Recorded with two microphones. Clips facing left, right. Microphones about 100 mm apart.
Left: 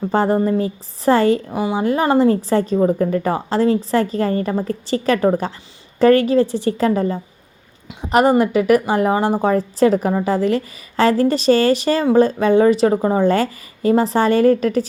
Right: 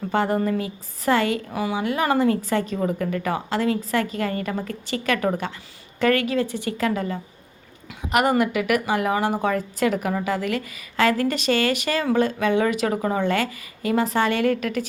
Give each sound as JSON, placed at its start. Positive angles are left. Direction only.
{"t": 0.1, "sound": "a woman's voice", "side_deg": 35}